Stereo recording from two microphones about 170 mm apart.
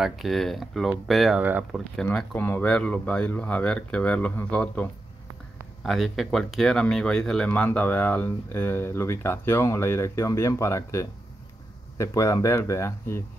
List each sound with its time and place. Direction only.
0.0 s speech: centre (ahead or behind)
2.0 s speech: 10° left (ahead or behind)
5.9 s speech: centre (ahead or behind); by 13.2 s 15° left (ahead or behind)